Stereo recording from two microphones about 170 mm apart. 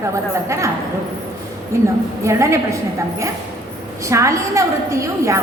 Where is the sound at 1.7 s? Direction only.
15° right (ahead or behind).